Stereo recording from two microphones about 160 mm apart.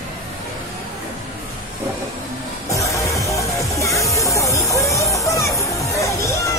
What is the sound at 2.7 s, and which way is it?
Music, 20° left (ahead or behind).